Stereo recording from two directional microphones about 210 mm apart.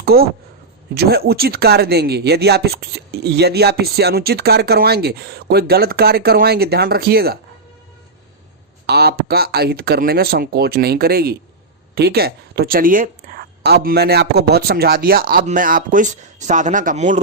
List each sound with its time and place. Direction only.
0.0 s speech: 45° right (ahead or behind)
8.9 s speech: 50° right (ahead or behind)